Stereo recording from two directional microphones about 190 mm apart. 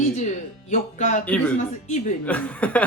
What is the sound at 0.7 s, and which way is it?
Speech, 40° left (ahead or behind).